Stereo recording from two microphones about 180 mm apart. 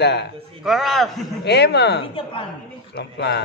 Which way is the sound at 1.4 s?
70° left (ahead or behind).